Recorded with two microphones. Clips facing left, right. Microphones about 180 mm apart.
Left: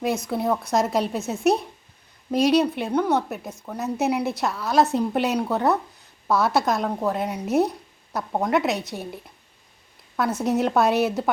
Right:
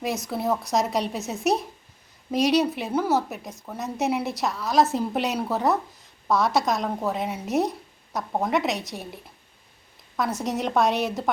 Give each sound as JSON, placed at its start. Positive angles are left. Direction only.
{"t": 0.0, "sound": "a woman's voice", "side_deg": 0}
{"t": 10.2, "sound": "a woman's voice", "side_deg": 0}